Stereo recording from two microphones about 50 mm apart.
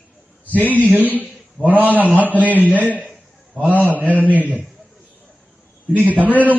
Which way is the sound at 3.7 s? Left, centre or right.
Left.